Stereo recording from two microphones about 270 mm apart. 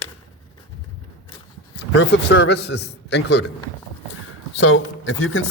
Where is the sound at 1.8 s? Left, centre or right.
Left.